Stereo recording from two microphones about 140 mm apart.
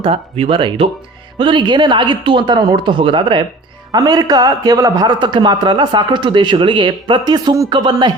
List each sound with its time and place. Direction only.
0.0 s a man's voice: 45° right (ahead or behind)